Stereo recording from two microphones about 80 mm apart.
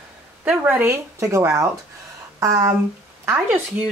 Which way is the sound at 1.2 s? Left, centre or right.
Right.